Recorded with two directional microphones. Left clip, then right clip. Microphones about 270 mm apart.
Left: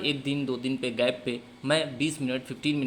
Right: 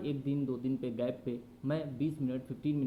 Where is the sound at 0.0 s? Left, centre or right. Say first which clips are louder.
Left 7 dB; centre.